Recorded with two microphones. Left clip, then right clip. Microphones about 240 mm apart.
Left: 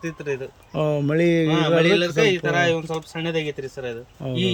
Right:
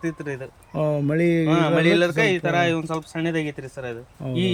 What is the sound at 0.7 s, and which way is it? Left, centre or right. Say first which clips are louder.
Speech: left 1 dB; centre.